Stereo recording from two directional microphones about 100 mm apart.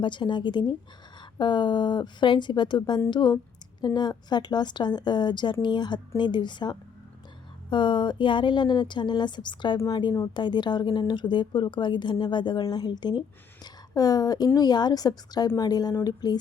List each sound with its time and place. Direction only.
0.0 s a woman's voice: 50° left (ahead or behind)